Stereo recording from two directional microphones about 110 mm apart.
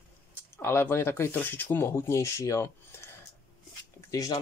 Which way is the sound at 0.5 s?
20° left (ahead or behind).